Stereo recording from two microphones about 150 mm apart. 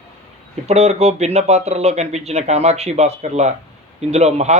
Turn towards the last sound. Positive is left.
turn(degrees=-45)  # may be behind; listen again after turning